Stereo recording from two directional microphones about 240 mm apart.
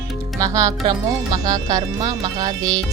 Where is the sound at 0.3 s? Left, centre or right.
Centre.